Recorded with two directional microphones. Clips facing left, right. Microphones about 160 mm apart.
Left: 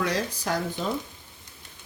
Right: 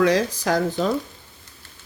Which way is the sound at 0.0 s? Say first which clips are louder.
Right 9 dB; 90° right.